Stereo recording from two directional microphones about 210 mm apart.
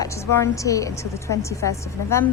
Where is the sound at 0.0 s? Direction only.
15° left (ahead or behind).